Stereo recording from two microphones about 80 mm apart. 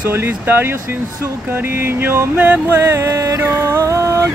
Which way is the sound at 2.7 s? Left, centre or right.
Right.